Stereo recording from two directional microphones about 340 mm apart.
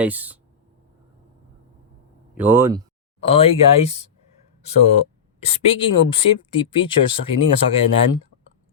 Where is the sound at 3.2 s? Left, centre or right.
Centre.